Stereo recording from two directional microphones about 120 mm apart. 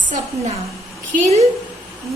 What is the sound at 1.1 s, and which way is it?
Speech, 60° right (ahead or behind).